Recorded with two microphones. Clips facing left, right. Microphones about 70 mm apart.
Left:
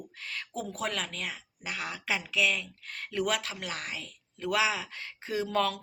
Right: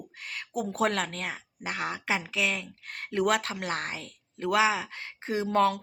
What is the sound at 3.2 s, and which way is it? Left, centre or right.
Speech, right.